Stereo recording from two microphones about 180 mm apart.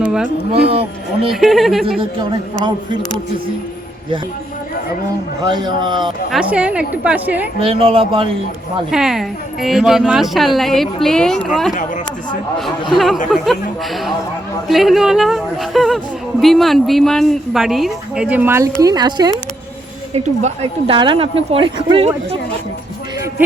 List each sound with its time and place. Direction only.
0.0 s a sound: 5° right (ahead or behind)
0.5 s speech: 35° right (ahead or behind)
1.3 s a woman's voice: centre (ahead or behind)
5.5 s speech: 25° right (ahead or behind)
6.3 s a woman's voice: 5° right (ahead or behind)
7.6 s speech: 30° right (ahead or behind)
8.9 s a woman's voice: centre (ahead or behind)
13.3 s a woman's voice: centre (ahead or behind); by 19.3 s 25° right (ahead or behind)
20.1 s speech: 40° right (ahead or behind)